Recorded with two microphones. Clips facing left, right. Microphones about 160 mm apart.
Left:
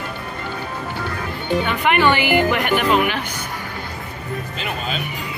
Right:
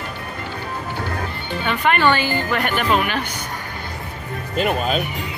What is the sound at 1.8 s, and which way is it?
A woman's voice, 15° left (ahead or behind).